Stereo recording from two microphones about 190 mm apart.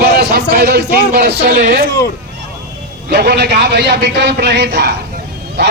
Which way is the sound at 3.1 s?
60° right (ahead or behind).